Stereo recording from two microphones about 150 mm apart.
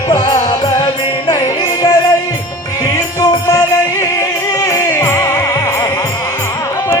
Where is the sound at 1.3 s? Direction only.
25° left (ahead or behind).